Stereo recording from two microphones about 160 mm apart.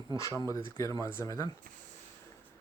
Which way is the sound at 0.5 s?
20° left (ahead or behind).